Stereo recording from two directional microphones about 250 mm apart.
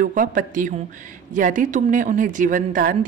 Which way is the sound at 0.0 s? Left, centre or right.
Right.